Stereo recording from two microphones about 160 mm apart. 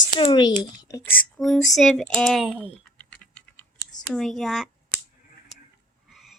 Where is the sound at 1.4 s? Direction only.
Centre (ahead or behind).